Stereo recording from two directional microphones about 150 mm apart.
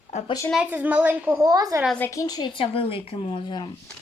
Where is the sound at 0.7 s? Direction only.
10° right (ahead or behind).